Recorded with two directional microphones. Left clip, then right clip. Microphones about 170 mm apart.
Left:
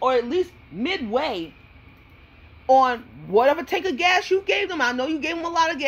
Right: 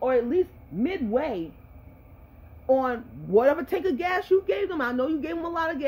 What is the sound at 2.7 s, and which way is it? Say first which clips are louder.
A woman's voice: left 7 dB; 10° right (ahead or behind).